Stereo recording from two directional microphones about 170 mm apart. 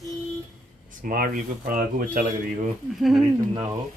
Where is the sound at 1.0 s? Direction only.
55° right (ahead or behind).